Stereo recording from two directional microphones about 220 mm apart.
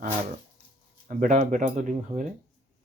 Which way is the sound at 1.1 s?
35° right (ahead or behind).